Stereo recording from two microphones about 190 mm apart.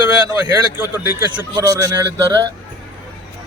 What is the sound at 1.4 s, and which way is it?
A man's voice, 15° right (ahead or behind).